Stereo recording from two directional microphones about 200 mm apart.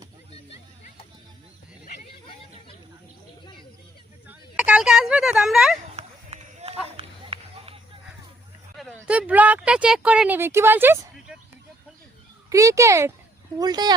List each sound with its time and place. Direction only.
4.3 s a sound: 5° right (ahead or behind)
6.0 s run: 30° right (ahead or behind)
8.8 s speech: 5° right (ahead or behind)
12.5 s speech: 15° right (ahead or behind)